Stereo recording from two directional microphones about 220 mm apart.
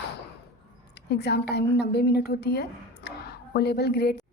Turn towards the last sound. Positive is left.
turn(degrees=45)  # may be behind; listen again after turning